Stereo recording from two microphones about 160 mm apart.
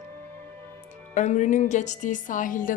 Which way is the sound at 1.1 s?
50° left (ahead or behind).